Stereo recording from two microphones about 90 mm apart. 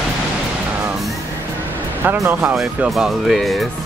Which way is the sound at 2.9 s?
Centre (ahead or behind).